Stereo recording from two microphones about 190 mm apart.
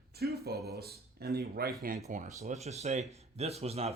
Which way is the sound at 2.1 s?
40° right (ahead or behind).